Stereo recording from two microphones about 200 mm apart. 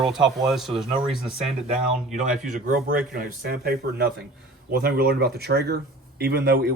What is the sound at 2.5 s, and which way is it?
Speech, 45° right (ahead or behind).